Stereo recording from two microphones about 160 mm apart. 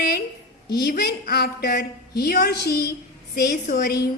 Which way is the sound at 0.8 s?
85° left.